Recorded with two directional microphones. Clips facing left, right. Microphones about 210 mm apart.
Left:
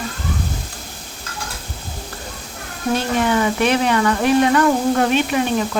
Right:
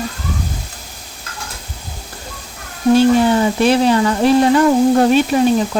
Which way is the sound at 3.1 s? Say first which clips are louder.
Right 4 dB; 30° right (ahead or behind).